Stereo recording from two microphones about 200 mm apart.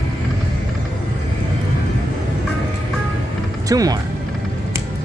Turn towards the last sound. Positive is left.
turn(degrees=-20)  # may be behind; listen again after turning